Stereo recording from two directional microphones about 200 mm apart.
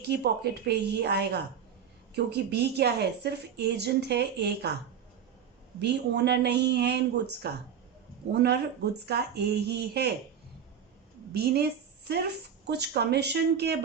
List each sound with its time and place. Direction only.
0.1 s speech: 55° right (ahead or behind)
5.8 s speech: 60° right (ahead or behind)
11.3 s a woman's voice: 50° right (ahead or behind)